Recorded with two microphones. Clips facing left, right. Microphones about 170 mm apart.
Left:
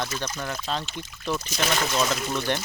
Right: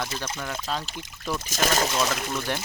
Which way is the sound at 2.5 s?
5° right (ahead or behind).